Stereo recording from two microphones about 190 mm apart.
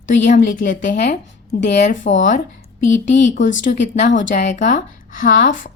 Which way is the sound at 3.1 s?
40° left (ahead or behind).